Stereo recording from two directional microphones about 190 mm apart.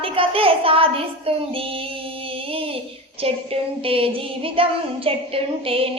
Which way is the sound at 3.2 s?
30° right (ahead or behind).